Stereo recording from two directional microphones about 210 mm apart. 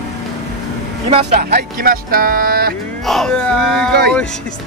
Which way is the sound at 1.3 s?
45° right (ahead or behind).